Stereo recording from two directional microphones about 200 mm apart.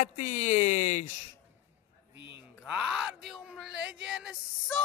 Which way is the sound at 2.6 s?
5° right (ahead or behind).